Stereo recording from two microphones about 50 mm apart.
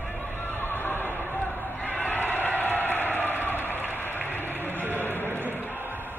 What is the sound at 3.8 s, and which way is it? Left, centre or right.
Applause, left.